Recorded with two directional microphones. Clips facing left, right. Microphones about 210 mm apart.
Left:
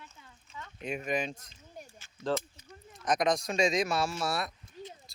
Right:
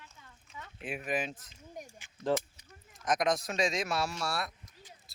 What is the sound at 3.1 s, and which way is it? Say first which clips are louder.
Speech: left 2 dB; centre (ahead or behind).